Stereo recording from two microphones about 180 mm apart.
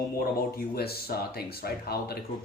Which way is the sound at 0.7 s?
60° left (ahead or behind).